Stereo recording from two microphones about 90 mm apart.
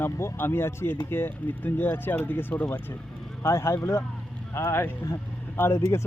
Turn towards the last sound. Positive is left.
turn(degrees=30)  # may be behind; listen again after turning